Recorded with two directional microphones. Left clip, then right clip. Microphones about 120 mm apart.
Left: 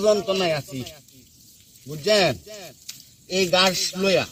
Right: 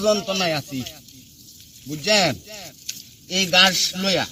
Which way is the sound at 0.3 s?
35° right (ahead or behind).